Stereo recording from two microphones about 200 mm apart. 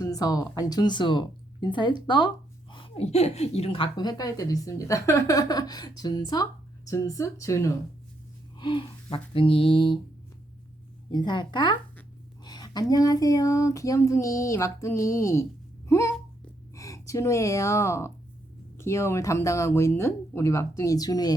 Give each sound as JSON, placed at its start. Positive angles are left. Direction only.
{"t": 0.0, "sound": "speech", "side_deg": 20}
{"t": 11.1, "sound": "speech", "side_deg": 20}
{"t": 15.9, "sound": "a sound", "side_deg": 15}
{"t": 16.7, "sound": "speech", "side_deg": 15}